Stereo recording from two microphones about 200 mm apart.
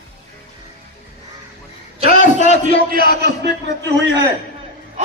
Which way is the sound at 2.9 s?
50° right (ahead or behind).